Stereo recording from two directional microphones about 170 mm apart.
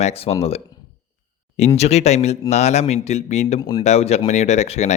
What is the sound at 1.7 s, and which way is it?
Speech, 40° left (ahead or behind).